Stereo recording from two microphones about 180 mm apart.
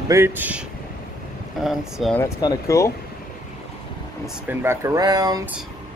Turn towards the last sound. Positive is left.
turn(degrees=-20)  # may be behind; listen again after turning